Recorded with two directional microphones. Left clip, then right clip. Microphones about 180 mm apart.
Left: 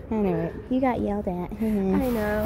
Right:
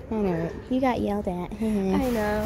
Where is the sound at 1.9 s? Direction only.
10° right (ahead or behind).